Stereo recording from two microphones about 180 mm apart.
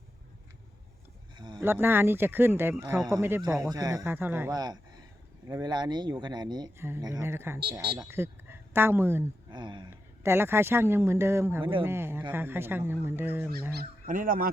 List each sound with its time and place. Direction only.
1.4 s a sound: 25° right (ahead or behind)
1.6 s speech: 10° right (ahead or behind)
4.5 s a sound: 20° right (ahead or behind)
5.5 s speech: 20° right (ahead or behind)
9.5 s speech: 25° right (ahead or behind)
10.2 s speech: 15° right (ahead or behind)
13.7 s speech: 50° right (ahead or behind)